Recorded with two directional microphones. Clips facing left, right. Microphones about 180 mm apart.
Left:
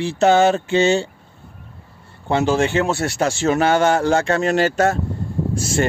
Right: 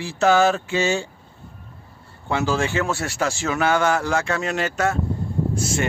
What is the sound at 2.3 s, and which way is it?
Speech, 25° left (ahead or behind).